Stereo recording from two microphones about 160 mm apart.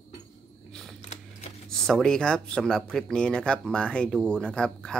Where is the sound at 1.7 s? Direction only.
5° left (ahead or behind).